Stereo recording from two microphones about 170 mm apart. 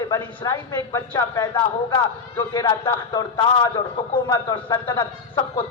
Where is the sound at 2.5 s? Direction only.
20° left (ahead or behind).